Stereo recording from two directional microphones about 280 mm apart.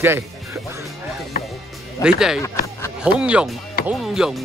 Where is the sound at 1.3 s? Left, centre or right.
Left.